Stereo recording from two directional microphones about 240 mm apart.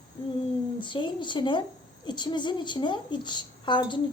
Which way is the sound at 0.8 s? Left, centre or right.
Centre.